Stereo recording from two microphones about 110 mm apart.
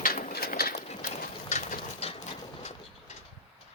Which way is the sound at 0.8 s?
85° left.